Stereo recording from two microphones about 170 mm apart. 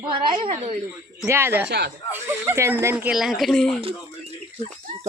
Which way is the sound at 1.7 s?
80° right.